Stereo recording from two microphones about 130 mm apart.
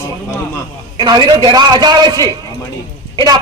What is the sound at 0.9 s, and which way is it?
A man's voice, 35° right (ahead or behind).